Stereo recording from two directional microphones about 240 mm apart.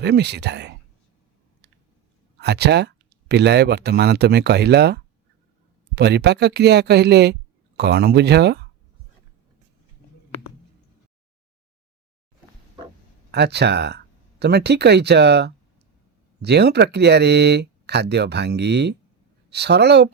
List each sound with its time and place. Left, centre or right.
0.0 s speech: right
2.4 s speech: right
13.3 s speech: right